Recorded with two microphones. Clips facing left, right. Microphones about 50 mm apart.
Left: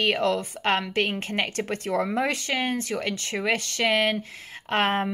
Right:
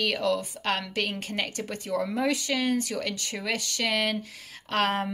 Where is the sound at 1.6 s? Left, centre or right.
Left.